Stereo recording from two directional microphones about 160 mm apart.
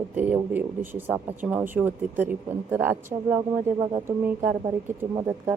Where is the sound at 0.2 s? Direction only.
10° right (ahead or behind).